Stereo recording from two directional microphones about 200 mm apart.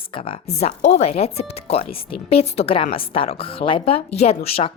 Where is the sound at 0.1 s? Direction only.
25° left (ahead or behind).